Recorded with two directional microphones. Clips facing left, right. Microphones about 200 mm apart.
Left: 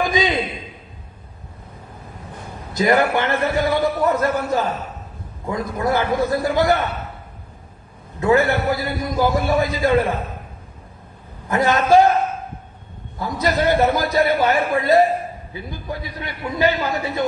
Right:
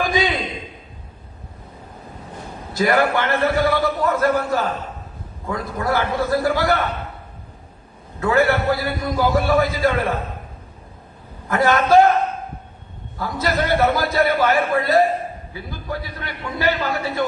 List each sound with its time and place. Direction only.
0.0 s a sound: 20° left (ahead or behind)
2.7 s a man's voice: 20° left (ahead or behind)
8.2 s a man's voice: 20° left (ahead or behind)
11.4 s a man's voice: 20° left (ahead or behind)
13.4 s a man's voice: 15° left (ahead or behind)